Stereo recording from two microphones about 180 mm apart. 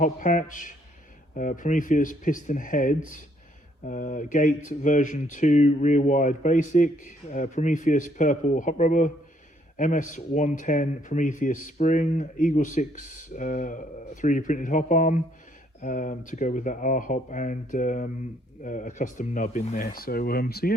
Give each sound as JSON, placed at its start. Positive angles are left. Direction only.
{"t": 0.0, "sound": "speech", "side_deg": 45}